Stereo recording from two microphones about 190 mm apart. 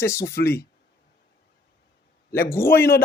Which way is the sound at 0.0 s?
15° left (ahead or behind).